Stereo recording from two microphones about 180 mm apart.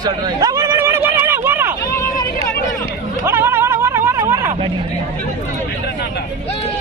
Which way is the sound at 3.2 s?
15° right (ahead or behind).